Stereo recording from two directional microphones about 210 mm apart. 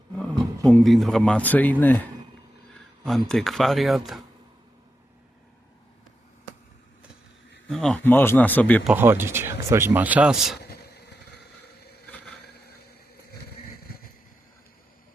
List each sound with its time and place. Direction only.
0.2 s speech: 5° left (ahead or behind)
7.7 s a man's voice: 5° left (ahead or behind)
8.9 s speech: 10° right (ahead or behind)
10.6 s vehicle: 50° left (ahead or behind)
12.0 s a sound: 5° left (ahead or behind)